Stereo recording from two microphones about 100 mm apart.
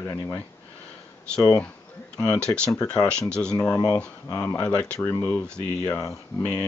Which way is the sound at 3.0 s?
10° left (ahead or behind).